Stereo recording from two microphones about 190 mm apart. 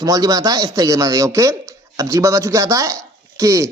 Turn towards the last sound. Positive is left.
turn(degrees=-15)  # may be behind; listen again after turning